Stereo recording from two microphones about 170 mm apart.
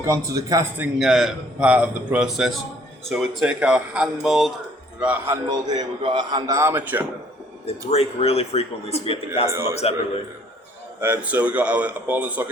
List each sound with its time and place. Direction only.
0.0 s a man's voice: 20° right (ahead or behind)
0.8 s a man's voice: centre (ahead or behind)
5.5 s a man's voice: 25° right (ahead or behind)
7.9 s speech: 35° left (ahead or behind)
11.0 s speech: 10° right (ahead or behind)